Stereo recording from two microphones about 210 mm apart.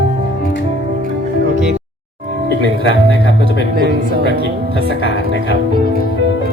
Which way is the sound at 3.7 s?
50° right (ahead or behind).